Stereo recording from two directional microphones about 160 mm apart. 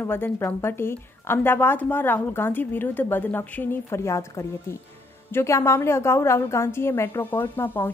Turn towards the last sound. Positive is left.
turn(degrees=15)  # may be behind; listen again after turning